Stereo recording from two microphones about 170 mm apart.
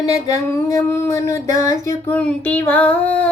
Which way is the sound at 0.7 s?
15° left (ahead or behind).